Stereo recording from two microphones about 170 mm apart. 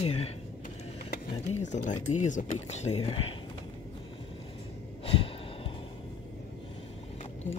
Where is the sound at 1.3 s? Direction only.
45° left (ahead or behind).